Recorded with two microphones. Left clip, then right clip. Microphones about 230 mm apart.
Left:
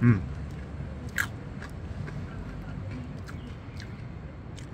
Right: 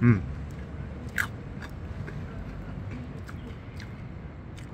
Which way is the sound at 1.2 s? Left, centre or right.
Centre.